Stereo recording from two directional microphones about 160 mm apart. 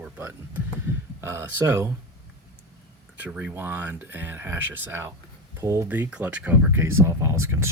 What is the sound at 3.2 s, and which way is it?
Speech, 10° right (ahead or behind).